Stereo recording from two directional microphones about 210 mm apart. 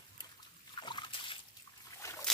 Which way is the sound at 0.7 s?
20° left (ahead or behind).